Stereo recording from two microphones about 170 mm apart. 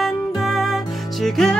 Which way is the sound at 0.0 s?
Centre (ahead or behind).